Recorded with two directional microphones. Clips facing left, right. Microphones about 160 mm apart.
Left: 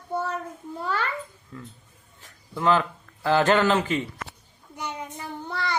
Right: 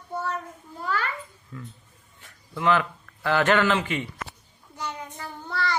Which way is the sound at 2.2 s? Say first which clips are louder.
Left 1 dB; 35° left (ahead or behind).